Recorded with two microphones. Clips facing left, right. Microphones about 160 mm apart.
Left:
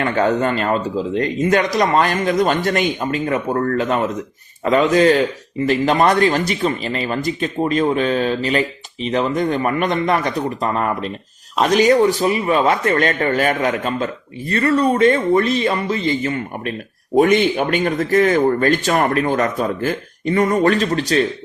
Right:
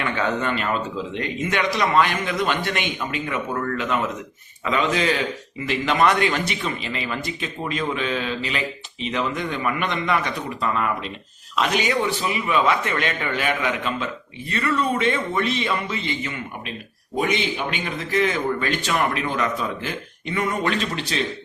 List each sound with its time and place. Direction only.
0.0 s a man's voice: 40° left (ahead or behind)
17.2 s a man's voice: 50° left (ahead or behind)